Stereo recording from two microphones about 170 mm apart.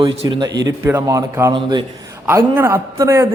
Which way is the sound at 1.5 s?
30° right (ahead or behind).